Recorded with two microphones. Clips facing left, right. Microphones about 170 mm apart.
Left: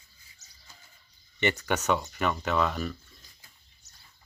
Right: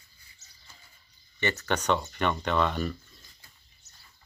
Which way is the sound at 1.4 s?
15° left (ahead or behind).